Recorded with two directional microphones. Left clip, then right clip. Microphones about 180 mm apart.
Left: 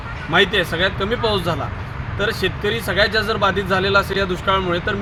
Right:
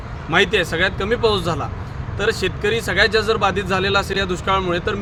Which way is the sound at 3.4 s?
30° right (ahead or behind).